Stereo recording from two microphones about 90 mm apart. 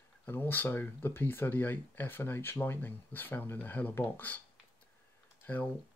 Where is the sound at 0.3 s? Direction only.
20° left (ahead or behind).